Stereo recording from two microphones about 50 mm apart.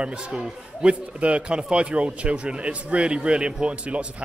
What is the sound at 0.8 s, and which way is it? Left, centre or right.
A man's voice, right.